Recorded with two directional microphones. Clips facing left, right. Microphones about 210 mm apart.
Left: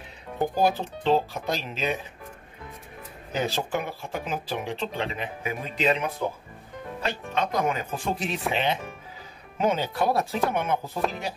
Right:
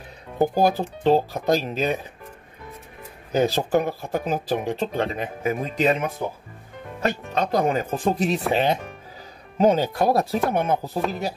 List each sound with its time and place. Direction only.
0.4 s speech: 40° right (ahead or behind)
3.3 s speech: 40° right (ahead or behind)